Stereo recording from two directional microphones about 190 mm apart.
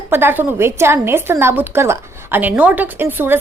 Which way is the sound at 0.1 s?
10° right (ahead or behind).